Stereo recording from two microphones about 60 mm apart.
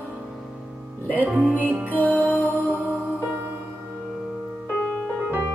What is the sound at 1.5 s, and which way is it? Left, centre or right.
Music, right.